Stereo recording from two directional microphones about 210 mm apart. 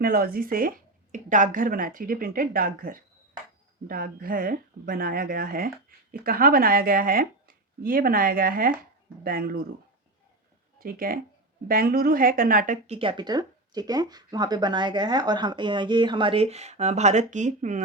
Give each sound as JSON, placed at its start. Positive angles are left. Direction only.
{"t": 0.0, "sound": "speech", "side_deg": -45}
{"t": 10.8, "sound": "speech", "side_deg": -45}
{"t": 13.0, "sound": "speech", "side_deg": -20}